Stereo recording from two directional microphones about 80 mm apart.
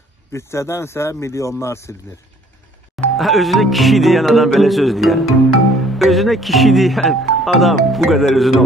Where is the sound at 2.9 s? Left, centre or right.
Centre.